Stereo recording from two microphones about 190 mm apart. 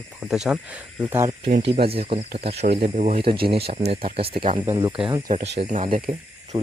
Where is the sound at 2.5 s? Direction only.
55° right (ahead or behind).